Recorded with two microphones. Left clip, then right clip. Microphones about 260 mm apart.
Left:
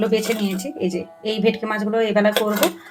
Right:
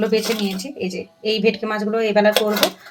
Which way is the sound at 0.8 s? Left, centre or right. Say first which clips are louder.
Left 2 dB; centre.